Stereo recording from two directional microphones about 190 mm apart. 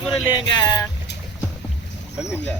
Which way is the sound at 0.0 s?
Centre (ahead or behind).